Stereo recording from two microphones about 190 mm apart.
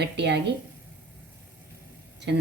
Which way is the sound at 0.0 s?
65° right (ahead or behind).